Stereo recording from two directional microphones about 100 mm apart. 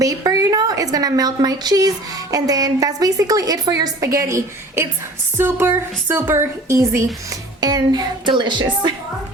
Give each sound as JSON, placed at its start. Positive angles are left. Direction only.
{"t": 0.0, "sound": "a woman's voice", "side_deg": -35}
{"t": 7.6, "sound": "speech", "side_deg": -45}